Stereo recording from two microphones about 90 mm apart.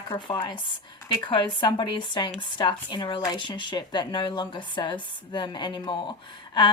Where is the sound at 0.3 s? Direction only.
60° left (ahead or behind).